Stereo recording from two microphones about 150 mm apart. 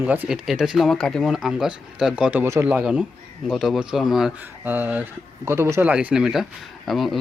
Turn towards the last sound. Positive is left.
turn(degrees=0)  # may be behind; listen again after turning